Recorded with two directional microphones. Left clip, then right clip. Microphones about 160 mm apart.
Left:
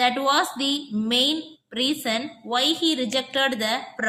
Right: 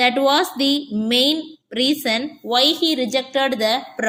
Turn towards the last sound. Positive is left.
turn(degrees=-15)  # may be behind; listen again after turning